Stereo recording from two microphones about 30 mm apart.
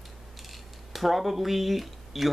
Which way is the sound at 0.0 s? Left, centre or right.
Centre.